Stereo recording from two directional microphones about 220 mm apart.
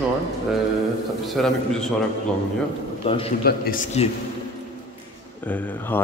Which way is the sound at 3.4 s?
40° left (ahead or behind).